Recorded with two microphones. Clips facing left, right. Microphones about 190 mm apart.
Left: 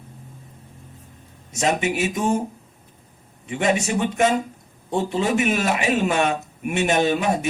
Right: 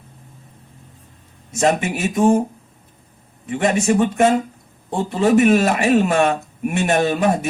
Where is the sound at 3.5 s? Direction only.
50° right (ahead or behind).